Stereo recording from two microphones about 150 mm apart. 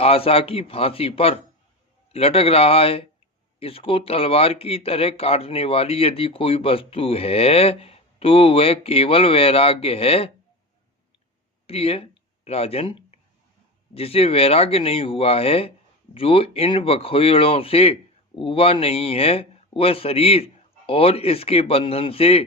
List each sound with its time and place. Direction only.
0.0 s speech: 40° left (ahead or behind)
11.6 s speech: 40° left (ahead or behind)